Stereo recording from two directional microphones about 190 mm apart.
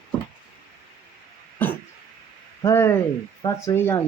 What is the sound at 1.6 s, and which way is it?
Throat clearing, 10° left (ahead or behind).